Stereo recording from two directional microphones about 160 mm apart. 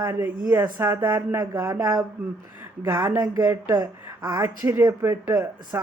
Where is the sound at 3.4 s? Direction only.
15° right (ahead or behind).